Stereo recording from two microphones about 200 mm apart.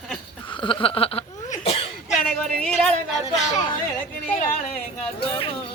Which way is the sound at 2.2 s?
5° left (ahead or behind).